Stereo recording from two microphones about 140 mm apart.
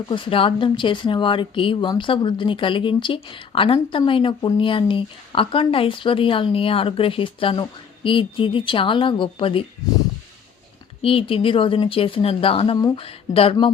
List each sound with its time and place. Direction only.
0.1 s a woman's voice: 40° left (ahead or behind)
11.0 s a woman's voice: 40° left (ahead or behind)